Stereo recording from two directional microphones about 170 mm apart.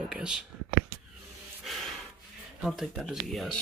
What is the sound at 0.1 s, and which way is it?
Speech, 5° right (ahead or behind).